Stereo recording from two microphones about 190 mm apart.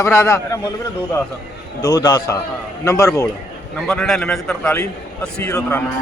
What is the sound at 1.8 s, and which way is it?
A man's voice, 20° left (ahead or behind).